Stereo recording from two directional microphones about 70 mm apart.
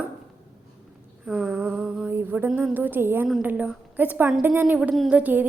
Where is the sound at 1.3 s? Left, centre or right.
Centre.